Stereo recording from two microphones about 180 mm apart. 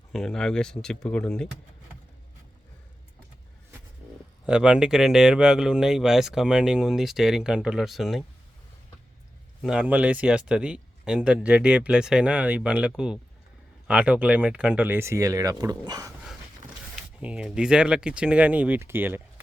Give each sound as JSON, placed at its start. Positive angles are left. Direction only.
{"t": 0.1, "sound": "speech", "side_deg": 5}
{"t": 4.4, "sound": "speech", "side_deg": -5}
{"t": 9.6, "sound": "speech", "side_deg": -5}
{"t": 16.9, "sound": "speech", "side_deg": -5}